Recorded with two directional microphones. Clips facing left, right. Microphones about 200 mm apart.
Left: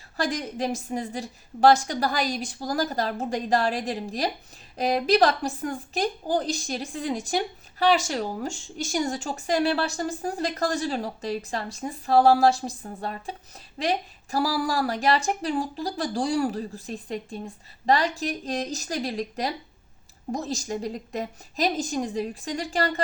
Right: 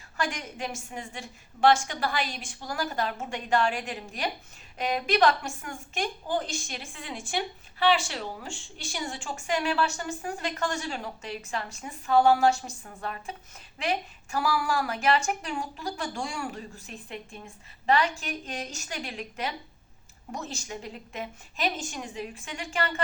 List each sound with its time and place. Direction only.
0.2 s a woman's voice: 35° left (ahead or behind)